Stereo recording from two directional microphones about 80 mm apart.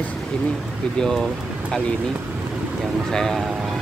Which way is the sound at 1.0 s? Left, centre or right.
Centre.